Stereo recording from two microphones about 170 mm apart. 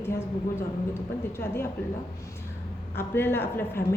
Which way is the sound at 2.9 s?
15° left (ahead or behind).